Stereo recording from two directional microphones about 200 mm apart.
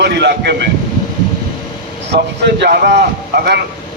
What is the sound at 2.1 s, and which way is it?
A man's voice, 55° right (ahead or behind).